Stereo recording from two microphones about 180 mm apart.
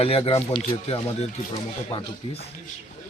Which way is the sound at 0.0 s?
30° left (ahead or behind).